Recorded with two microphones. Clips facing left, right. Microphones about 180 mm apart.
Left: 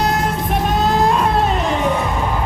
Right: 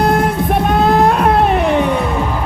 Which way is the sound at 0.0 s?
55° right (ahead or behind).